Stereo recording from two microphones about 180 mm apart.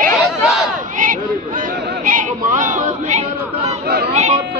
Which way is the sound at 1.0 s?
50° right (ahead or behind).